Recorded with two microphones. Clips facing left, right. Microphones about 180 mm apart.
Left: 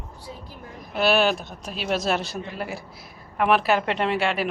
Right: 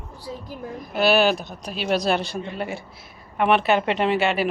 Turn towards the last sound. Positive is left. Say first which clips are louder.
# right 3 dB
turn(degrees=0)  # may be behind; listen again after turning